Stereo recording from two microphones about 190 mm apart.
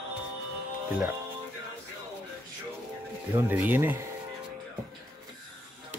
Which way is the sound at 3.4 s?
10° right (ahead or behind).